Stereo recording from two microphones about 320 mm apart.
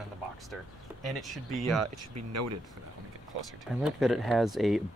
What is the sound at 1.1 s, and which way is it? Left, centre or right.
Speech, centre.